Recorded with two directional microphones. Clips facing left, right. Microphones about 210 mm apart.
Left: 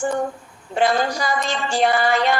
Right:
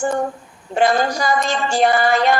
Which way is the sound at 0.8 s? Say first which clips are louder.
Right 2 dB; 45° right (ahead or behind).